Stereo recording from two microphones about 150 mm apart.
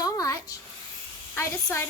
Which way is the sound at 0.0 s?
25° left (ahead or behind).